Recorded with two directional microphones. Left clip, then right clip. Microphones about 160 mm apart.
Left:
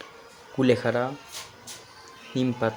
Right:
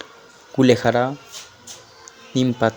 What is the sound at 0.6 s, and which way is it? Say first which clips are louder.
Speech: right 7 dB; 45° right (ahead or behind).